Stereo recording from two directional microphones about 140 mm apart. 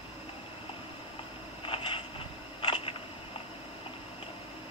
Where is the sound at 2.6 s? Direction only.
40° left (ahead or behind).